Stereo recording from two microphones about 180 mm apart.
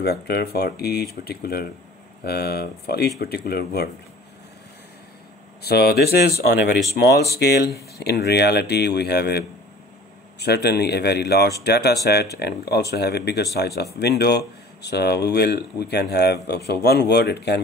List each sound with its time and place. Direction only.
0.0 s speech: 60° left (ahead or behind)
5.6 s speech: 60° left (ahead or behind)
10.4 s speech: 65° left (ahead or behind)